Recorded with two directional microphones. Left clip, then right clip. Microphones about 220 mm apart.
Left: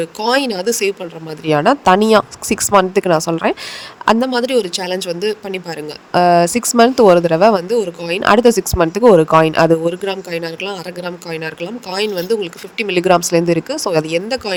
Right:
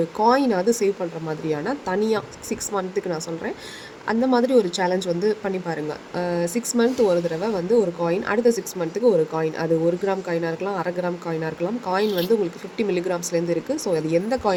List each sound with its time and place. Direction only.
0.3 s speech: 45° left (ahead or behind)